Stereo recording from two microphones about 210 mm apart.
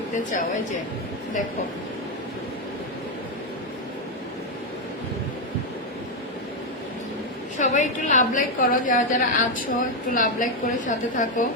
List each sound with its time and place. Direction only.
0.1 s a woman's voice: 35° left (ahead or behind)
7.6 s a woman's voice: 35° left (ahead or behind)